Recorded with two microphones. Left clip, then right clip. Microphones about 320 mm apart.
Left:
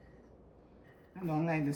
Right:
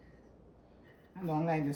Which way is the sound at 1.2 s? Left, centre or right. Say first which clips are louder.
Right 1 dB; centre.